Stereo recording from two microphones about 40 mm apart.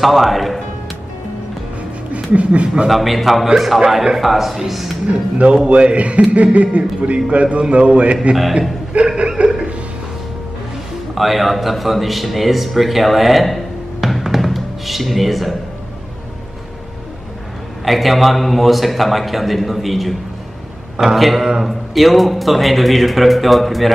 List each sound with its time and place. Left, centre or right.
0.0 s speech: centre
2.1 s speech: right
2.9 s speech: centre
5.0 s a man's voice: right
9.4 s a sound: right
11.1 s speech: centre
14.0 s music: centre
17.8 s speech: centre
21.4 s a man's voice: centre
21.6 s speech: centre